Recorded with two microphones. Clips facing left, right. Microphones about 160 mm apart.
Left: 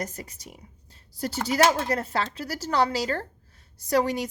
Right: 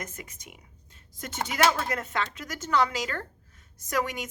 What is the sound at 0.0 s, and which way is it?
A woman's voice, 35° left (ahead or behind).